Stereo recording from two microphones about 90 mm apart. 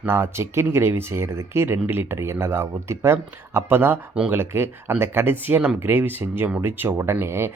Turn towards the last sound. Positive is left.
turn(degrees=-30)  # may be behind; listen again after turning